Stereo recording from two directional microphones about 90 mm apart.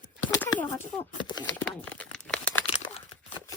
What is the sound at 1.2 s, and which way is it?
Speech, 55° left (ahead or behind).